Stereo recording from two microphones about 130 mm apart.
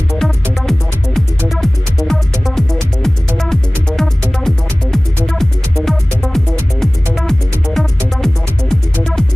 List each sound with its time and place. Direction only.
0.2 s music: centre (ahead or behind)